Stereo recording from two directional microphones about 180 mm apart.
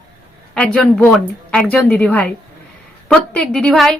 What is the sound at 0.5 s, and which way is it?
A woman's voice, 5° left (ahead or behind).